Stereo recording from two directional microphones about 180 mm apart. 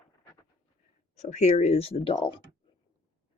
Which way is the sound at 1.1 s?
40° left (ahead or behind).